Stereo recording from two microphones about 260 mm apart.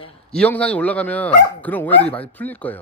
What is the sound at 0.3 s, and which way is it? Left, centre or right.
Speech, centre.